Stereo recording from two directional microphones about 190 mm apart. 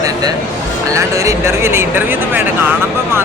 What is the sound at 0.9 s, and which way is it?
Speech, 15° right (ahead or behind).